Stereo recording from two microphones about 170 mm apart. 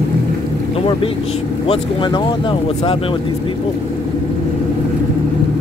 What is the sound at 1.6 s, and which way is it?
Speech, 30° left (ahead or behind).